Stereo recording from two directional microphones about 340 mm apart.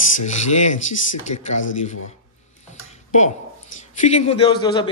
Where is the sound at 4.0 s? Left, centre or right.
Centre.